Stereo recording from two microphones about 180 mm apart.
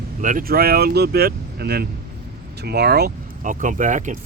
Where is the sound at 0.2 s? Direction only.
45° right (ahead or behind).